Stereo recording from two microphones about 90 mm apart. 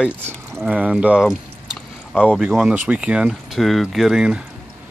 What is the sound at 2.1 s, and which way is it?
Speech, 10° left (ahead or behind).